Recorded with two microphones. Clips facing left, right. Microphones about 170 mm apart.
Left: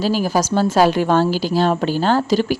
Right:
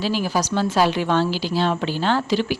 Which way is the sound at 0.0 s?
40° left (ahead or behind).